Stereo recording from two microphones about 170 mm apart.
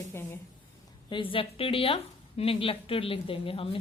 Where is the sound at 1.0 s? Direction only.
30° left (ahead or behind).